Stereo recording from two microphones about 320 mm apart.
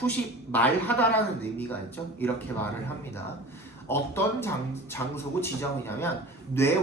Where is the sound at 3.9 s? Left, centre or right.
Centre.